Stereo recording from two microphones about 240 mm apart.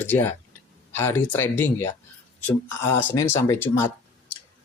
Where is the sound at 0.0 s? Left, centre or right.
Centre.